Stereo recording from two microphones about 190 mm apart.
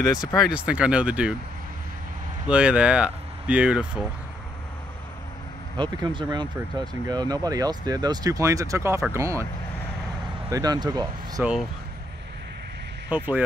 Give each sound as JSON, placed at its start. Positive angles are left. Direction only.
{"t": 0.3, "sound": "speech", "side_deg": -5}
{"t": 2.4, "sound": "speech", "side_deg": -5}
{"t": 5.8, "sound": "speech", "side_deg": -25}
{"t": 10.5, "sound": "speech", "side_deg": -20}
{"t": 13.1, "sound": "speech", "side_deg": -10}